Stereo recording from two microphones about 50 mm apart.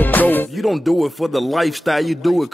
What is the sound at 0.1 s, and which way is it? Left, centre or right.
Music, left.